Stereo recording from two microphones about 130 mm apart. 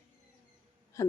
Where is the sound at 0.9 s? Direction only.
25° left (ahead or behind).